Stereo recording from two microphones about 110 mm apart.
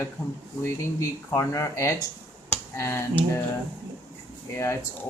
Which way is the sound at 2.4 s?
25° left (ahead or behind).